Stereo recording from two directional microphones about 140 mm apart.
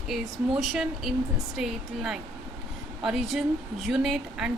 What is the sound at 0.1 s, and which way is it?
A woman's voice, centre (ahead or behind).